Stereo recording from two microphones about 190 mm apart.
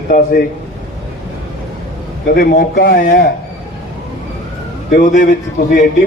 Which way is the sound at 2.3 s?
50° left (ahead or behind).